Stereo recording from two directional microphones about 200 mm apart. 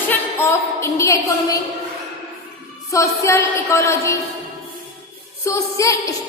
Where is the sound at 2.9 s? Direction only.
15° left (ahead or behind).